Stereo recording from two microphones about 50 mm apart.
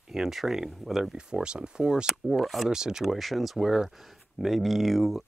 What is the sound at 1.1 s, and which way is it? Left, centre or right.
Speech, centre.